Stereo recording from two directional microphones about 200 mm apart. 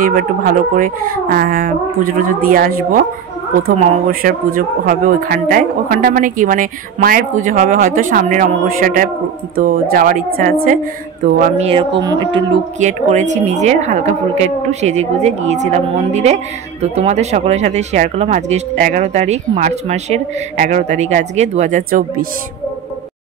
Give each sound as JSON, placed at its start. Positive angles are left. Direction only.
{"t": 0.0, "sound": "speech", "side_deg": -45}
{"t": 12.7, "sound": "speech", "side_deg": -35}